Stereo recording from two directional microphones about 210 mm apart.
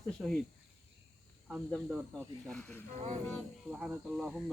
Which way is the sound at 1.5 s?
Centre (ahead or behind).